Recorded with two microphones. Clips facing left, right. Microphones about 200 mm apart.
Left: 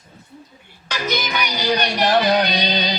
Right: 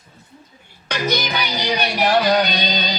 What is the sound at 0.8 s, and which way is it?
Music, 60° right (ahead or behind).